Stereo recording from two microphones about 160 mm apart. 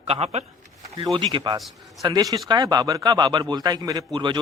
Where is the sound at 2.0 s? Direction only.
20° right (ahead or behind).